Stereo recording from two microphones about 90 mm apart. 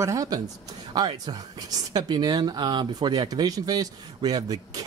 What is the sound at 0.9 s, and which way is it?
Speech, 50° right (ahead or behind).